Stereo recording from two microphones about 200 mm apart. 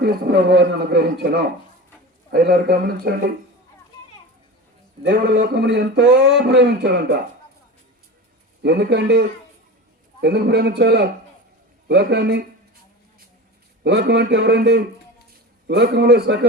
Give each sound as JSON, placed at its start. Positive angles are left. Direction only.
{"t": 0.0, "sound": "a man's voice", "side_deg": -50}
{"t": 5.0, "sound": "speech", "side_deg": -55}
{"t": 8.6, "sound": "speech", "side_deg": -60}
{"t": 13.8, "sound": "speech", "side_deg": -55}